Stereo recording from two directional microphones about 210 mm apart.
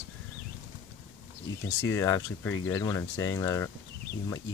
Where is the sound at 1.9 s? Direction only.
15° left (ahead or behind).